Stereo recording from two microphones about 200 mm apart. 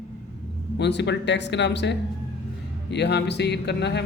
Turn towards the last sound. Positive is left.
turn(degrees=60)  # may be behind; listen again after turning